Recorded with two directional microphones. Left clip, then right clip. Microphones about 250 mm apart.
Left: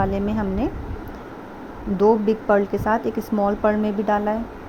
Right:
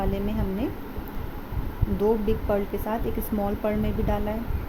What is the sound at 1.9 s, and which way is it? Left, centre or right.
Speech, centre.